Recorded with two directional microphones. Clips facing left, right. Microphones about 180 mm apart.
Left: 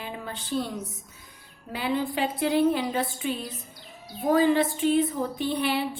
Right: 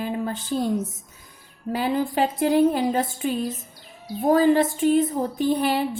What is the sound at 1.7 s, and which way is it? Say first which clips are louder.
A woman's voice: right 4 dB; 45° right (ahead or behind).